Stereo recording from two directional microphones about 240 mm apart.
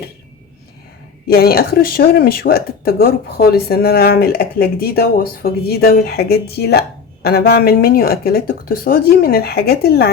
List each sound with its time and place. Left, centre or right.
1.3 s speech: left